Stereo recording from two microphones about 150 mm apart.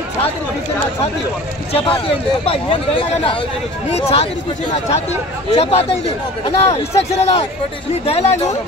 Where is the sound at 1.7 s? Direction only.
35° left (ahead or behind).